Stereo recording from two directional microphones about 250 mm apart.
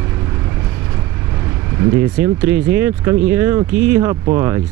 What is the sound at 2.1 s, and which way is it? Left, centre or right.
Speech, centre.